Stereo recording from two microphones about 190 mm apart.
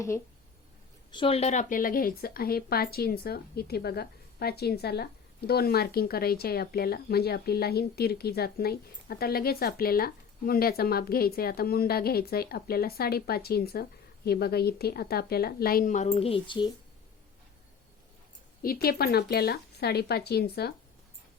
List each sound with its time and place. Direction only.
1.1 s speech: 30° left (ahead or behind)
18.6 s speech: 50° left (ahead or behind)